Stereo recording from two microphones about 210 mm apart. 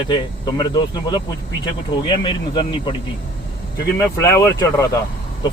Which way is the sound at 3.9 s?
15° left (ahead or behind).